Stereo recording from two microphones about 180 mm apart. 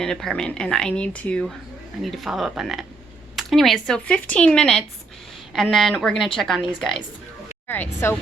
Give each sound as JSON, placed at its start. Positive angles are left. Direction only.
{"t": 0.0, "sound": "speech", "side_deg": 0}